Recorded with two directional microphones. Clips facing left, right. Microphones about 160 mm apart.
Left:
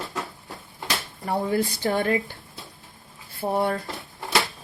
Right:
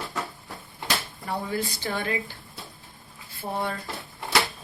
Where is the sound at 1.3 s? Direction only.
50° left (ahead or behind).